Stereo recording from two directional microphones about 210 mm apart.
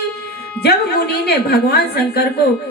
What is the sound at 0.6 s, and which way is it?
Speech, 50° left (ahead or behind).